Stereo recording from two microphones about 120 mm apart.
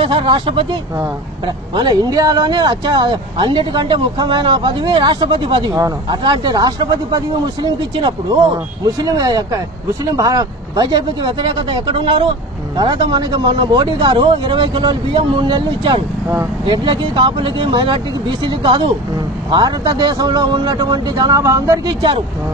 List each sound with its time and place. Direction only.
0.0 s speech: 45° right (ahead or behind)
5.7 s speech: 30° right (ahead or behind)